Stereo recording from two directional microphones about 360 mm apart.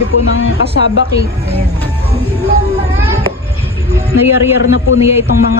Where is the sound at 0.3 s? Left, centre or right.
Left.